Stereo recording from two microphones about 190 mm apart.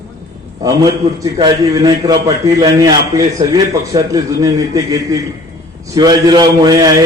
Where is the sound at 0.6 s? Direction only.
20° right (ahead or behind).